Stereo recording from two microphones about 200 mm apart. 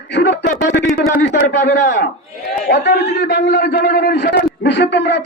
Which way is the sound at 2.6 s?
50° left (ahead or behind).